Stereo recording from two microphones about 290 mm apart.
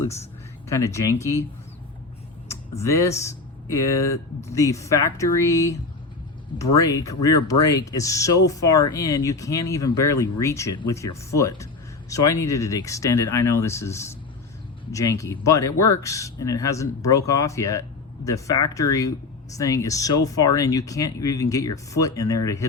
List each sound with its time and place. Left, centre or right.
0.7 s speech: centre
2.5 s speech: centre